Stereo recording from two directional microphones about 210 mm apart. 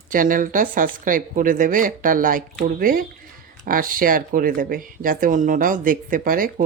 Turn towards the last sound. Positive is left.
turn(degrees=-40)  # may be behind; listen again after turning